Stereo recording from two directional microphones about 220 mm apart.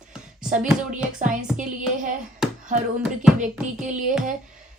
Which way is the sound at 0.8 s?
35° right (ahead or behind).